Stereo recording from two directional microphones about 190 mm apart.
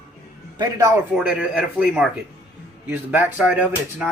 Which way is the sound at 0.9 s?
5° right (ahead or behind).